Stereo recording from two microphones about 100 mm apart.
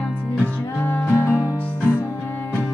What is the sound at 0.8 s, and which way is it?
Music, 20° left (ahead or behind).